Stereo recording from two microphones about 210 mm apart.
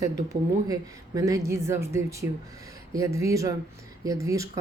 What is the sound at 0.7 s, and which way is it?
Speech, 15° right (ahead or behind).